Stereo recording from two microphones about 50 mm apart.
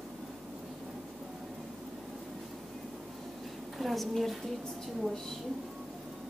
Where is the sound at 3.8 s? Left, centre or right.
Centre.